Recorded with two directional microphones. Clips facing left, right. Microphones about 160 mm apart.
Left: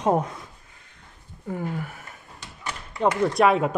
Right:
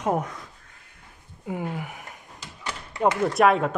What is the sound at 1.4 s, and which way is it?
Speech, 10° right (ahead or behind).